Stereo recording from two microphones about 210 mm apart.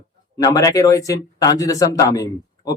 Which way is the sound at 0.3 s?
15° left (ahead or behind).